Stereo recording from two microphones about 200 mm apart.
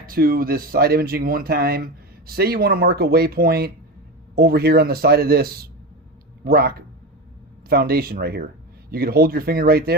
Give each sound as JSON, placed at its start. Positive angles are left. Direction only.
{"t": 0.0, "sound": "speech", "side_deg": -45}